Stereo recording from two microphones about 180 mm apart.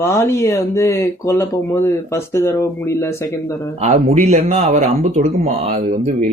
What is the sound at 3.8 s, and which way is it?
Speech, 40° right (ahead or behind).